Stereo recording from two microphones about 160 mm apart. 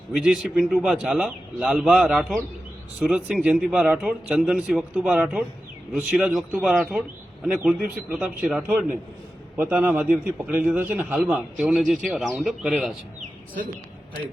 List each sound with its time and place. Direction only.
0.1 s a man's voice: 5° right (ahead or behind)